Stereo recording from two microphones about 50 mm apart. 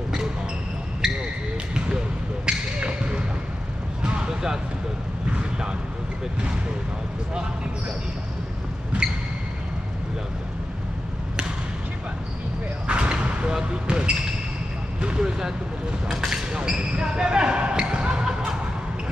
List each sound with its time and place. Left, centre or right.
1.0 s basketball bounce: centre
2.4 s basketball bounce: right
4.0 s a sound: centre
12.8 s basketball bounce: right
15.0 s vehicle: centre
16.1 s speech: centre
16.5 s basketball bounce: centre